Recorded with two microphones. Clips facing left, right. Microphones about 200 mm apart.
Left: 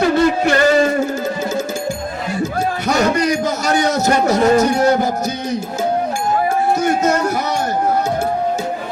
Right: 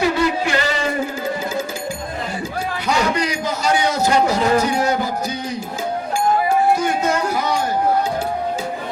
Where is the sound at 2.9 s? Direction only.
45° left (ahead or behind).